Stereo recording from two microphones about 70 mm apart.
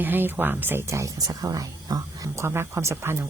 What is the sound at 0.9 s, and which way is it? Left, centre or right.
Speech, right.